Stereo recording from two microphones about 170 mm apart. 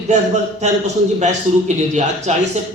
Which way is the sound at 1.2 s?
45° right (ahead or behind).